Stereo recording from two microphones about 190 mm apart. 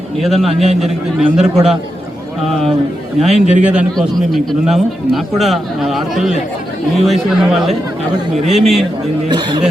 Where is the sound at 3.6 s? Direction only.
5° right (ahead or behind).